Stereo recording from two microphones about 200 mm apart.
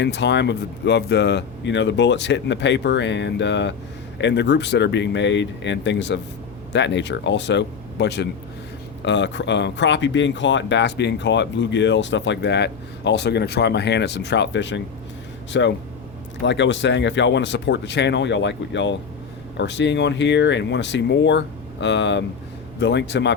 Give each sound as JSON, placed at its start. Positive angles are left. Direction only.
{"t": 0.0, "sound": "speech", "side_deg": 60}